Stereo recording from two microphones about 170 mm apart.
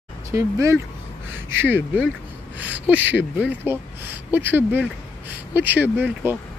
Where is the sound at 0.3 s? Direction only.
15° right (ahead or behind).